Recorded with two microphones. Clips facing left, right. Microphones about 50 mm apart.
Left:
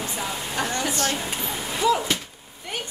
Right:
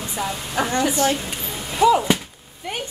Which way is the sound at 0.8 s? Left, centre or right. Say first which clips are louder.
Right 9 dB; centre.